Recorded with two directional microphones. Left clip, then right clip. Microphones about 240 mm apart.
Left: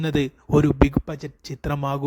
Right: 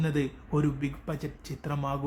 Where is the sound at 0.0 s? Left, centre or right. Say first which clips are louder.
Left 7 dB; left.